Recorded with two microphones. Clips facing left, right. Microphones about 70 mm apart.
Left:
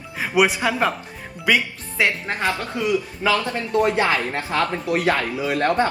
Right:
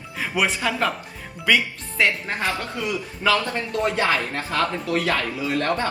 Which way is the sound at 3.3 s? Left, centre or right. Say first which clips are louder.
Left 2 dB; left.